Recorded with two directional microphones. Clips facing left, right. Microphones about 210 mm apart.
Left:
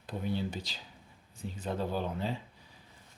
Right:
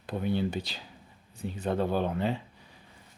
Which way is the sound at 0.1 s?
65° right (ahead or behind).